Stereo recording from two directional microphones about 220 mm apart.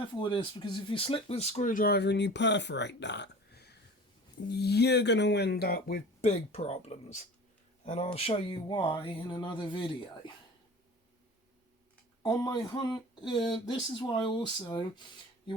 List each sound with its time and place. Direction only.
0.0 s speech: 20° left (ahead or behind); by 6.3 s 40° left (ahead or behind)
6.5 s speech: 30° left (ahead or behind)
12.2 s speech: 15° left (ahead or behind)